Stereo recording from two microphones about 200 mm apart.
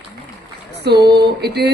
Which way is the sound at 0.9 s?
55° right (ahead or behind).